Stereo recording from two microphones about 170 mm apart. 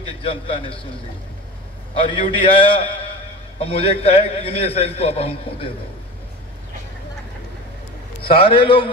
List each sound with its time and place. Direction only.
0.0 s a man's voice: 30° left (ahead or behind)
2.0 s a man's voice: 30° left (ahead or behind)
8.4 s a man's voice: 30° left (ahead or behind)